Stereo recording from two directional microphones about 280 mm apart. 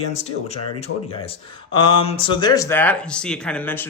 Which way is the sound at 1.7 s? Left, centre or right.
Centre.